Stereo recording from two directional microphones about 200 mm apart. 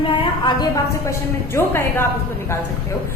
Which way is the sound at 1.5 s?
10° left (ahead or behind).